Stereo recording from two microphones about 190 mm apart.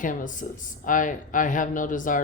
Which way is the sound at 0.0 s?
45° left (ahead or behind).